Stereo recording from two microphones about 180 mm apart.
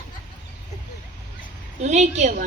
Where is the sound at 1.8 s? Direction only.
40° right (ahead or behind).